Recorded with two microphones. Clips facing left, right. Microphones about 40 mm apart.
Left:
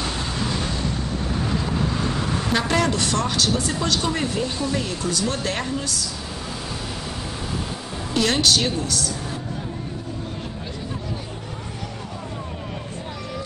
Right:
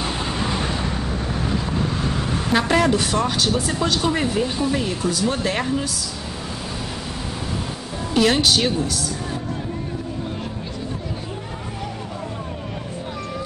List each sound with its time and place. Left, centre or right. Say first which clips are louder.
0.0 s vehicle: right 2 dB; centre
2.0 s a woman's voice: right 1 dB; centre
8.1 s a woman's voice: right 2 dB; centre